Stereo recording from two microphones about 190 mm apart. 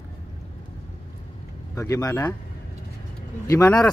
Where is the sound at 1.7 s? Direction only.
15° left (ahead or behind).